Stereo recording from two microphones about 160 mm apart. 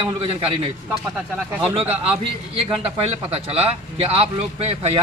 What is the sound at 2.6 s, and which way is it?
A man's voice, 40° right (ahead or behind).